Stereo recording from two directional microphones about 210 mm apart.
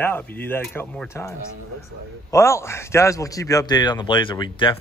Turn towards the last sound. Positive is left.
turn(degrees=25)  # may be behind; listen again after turning